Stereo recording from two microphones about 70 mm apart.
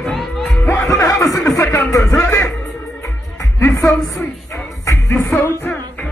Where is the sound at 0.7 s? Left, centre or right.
Left.